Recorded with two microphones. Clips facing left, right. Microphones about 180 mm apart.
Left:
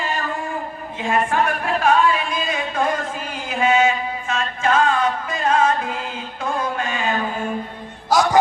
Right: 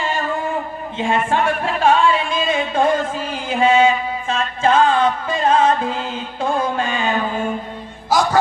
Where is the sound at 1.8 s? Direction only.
30° right (ahead or behind).